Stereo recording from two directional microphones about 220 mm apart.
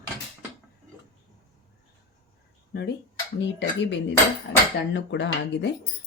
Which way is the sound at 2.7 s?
50° left (ahead or behind).